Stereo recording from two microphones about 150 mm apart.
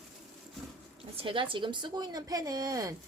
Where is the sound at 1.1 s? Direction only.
35° right (ahead or behind).